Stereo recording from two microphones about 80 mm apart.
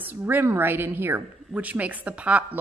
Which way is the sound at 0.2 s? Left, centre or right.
Right.